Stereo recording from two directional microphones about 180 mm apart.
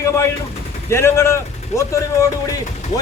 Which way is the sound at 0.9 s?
15° left (ahead or behind).